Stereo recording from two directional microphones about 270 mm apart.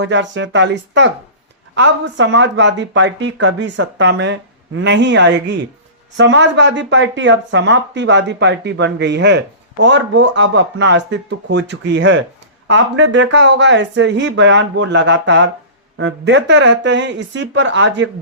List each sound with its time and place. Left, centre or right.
0.0 s speech: right